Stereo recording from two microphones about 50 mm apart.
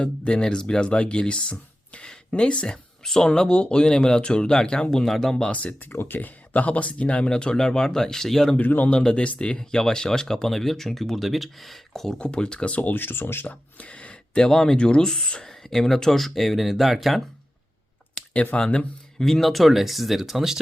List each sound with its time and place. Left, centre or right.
0.0 s speech: left
3.0 s speech: centre
5.5 s speech: left
5.9 s speech: left; by 8.5 s centre
8.5 s a man's voice: left
8.9 s speech: centre
12.2 s speech: centre
18.5 s speech: left
19.2 s speech: centre